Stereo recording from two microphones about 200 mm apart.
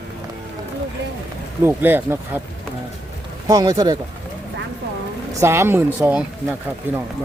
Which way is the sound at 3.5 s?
20° right (ahead or behind).